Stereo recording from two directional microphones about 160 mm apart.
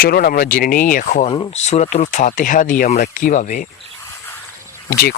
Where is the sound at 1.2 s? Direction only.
25° left (ahead or behind).